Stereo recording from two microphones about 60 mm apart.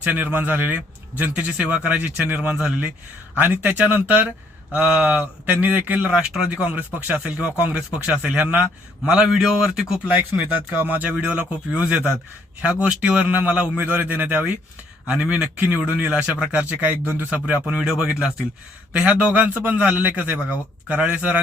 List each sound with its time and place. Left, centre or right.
0.0 s a man's voice: right
2.0 s a man's voice: right
6.1 s speech: centre
6.7 s speech: right
7.3 s a man's voice: centre
9.4 s speech: centre
10.3 s a man's voice: right
17.8 s speech: centre
18.9 s a man's voice: right